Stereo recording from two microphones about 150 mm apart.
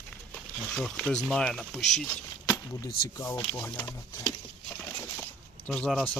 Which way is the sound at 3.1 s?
25° left (ahead or behind).